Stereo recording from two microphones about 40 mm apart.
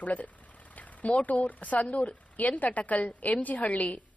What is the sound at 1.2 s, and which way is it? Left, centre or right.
A woman's voice, left.